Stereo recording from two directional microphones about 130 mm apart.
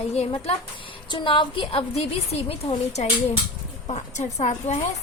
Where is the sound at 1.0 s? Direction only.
40° left (ahead or behind).